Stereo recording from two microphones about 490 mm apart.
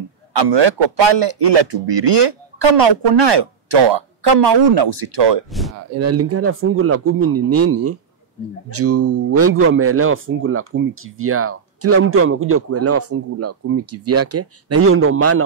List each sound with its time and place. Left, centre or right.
0.4 s a man's voice: right
5.9 s speech: right